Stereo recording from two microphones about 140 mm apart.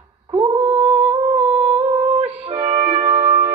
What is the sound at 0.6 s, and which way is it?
Humming, 40° right (ahead or behind).